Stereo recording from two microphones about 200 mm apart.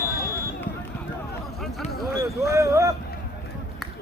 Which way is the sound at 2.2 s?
15° right (ahead or behind).